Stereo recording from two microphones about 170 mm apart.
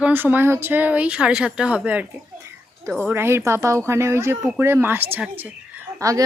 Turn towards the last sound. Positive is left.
turn(degrees=-20)  # may be behind; listen again after turning